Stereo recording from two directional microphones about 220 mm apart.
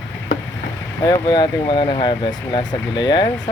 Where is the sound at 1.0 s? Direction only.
15° left (ahead or behind).